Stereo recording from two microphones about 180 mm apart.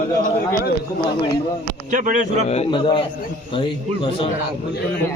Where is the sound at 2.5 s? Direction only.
30° left (ahead or behind).